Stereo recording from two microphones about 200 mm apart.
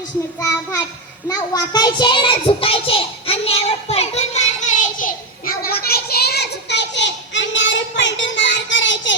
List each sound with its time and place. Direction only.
0.3 s child singing: 15° left (ahead or behind); by 9.1 s 65° left (ahead or behind)